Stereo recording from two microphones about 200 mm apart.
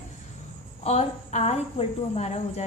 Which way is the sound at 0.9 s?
30° left (ahead or behind).